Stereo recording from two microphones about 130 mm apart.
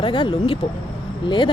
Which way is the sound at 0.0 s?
40° left (ahead or behind).